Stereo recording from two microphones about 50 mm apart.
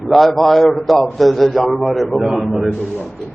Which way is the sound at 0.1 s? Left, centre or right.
Centre.